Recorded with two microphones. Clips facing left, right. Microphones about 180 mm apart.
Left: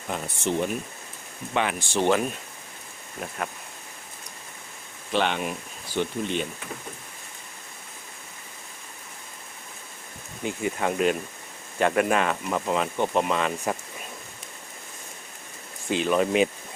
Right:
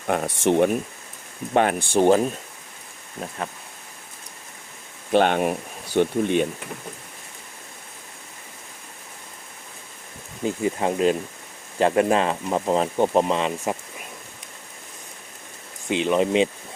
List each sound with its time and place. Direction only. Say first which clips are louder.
0.1 s speech: right 7 dB; 60° right (ahead or behind)
3.2 s speech: right 2 dB; 25° right (ahead or behind)
5.1 s speech: right 7 dB; 50° right (ahead or behind)
10.4 s speech: right 4 dB; 30° right (ahead or behind)
15.9 s speech: right 2 dB; 20° right (ahead or behind)